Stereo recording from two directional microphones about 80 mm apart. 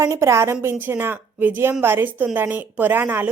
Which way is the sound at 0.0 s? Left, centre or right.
Right.